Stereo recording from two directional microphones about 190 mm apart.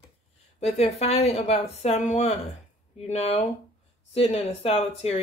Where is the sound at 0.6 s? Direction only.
35° left (ahead or behind).